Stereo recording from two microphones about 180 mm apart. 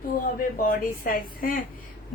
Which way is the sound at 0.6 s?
50° left (ahead or behind).